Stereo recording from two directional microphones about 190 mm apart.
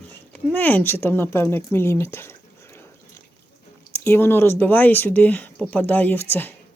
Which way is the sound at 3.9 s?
10° left (ahead or behind).